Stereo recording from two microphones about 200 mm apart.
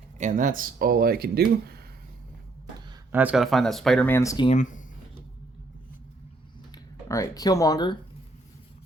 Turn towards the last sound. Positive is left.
turn(degrees=20)  # may be behind; listen again after turning